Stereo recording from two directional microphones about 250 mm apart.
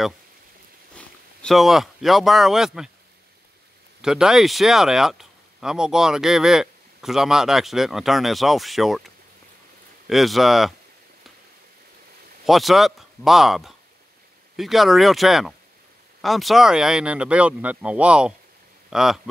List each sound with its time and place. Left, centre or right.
0.9 s speech: centre
4.0 s speech: centre
12.4 s speech: centre